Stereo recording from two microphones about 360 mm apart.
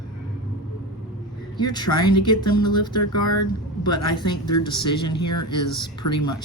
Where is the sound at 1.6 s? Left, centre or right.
Centre.